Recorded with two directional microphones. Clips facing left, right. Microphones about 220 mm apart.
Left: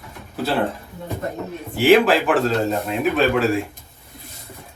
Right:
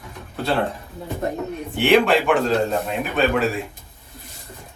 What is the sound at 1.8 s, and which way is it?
A man's voice, centre (ahead or behind).